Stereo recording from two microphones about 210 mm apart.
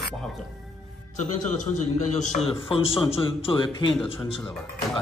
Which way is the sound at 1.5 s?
35° left (ahead or behind).